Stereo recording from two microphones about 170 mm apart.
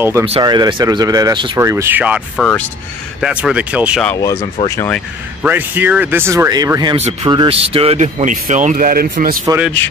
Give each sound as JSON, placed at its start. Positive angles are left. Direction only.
{"t": 0.0, "sound": "speech", "side_deg": -15}
{"t": 0.3, "sound": "speech", "side_deg": -25}
{"t": 1.6, "sound": "speech", "side_deg": -15}
{"t": 2.3, "sound": "speech", "side_deg": 5}
{"t": 3.2, "sound": "speech", "side_deg": -5}
{"t": 4.2, "sound": "speech", "side_deg": 20}
{"t": 5.4, "sound": "speech", "side_deg": -10}